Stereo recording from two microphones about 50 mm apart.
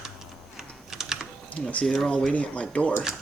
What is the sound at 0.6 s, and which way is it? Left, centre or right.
Typing, centre.